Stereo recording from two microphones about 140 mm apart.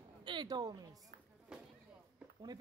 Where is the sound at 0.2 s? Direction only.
35° right (ahead or behind).